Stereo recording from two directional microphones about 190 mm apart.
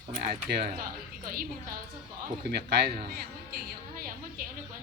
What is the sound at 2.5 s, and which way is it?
Speech, 60° right (ahead or behind).